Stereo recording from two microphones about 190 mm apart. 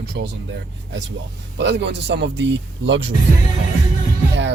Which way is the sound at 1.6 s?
65° right (ahead or behind).